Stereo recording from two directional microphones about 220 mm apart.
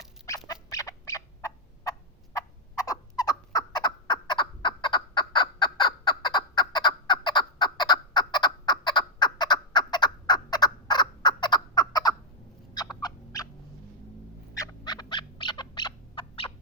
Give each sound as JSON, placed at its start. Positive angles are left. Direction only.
{"t": 0.4, "sound": "turkey", "side_deg": 15}
{"t": 12.7, "sound": "owl", "side_deg": 20}
{"t": 14.5, "sound": "bird", "side_deg": 15}